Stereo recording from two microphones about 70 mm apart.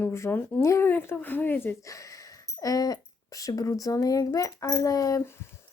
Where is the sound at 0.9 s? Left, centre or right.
Left.